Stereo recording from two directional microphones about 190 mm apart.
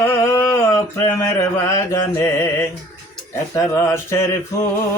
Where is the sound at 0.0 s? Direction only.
15° left (ahead or behind).